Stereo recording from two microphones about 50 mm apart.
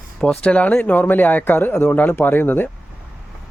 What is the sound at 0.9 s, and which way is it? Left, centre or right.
Speech, left.